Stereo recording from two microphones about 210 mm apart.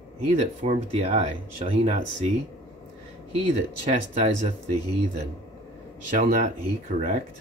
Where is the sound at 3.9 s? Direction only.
35° right (ahead or behind).